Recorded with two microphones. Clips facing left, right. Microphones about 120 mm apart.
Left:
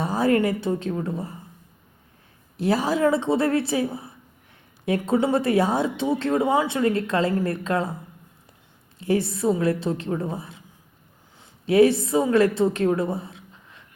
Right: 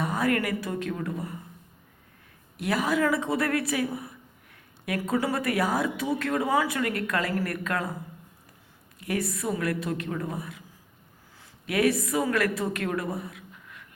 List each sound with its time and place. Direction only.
0.0 s speech: 30° left (ahead or behind)
2.6 s speech: 30° left (ahead or behind)
9.0 s a woman's voice: 30° left (ahead or behind)